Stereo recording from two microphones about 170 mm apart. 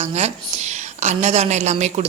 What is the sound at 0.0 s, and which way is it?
A woman's voice, 40° right (ahead or behind).